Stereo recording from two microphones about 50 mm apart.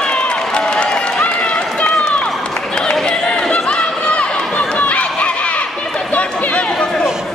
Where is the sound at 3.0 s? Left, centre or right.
Centre.